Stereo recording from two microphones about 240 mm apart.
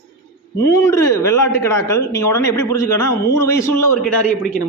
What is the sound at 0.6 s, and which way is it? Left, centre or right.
Speech, centre.